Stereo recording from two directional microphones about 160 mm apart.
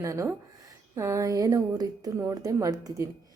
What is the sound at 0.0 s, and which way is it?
A woman's voice, 20° right (ahead or behind).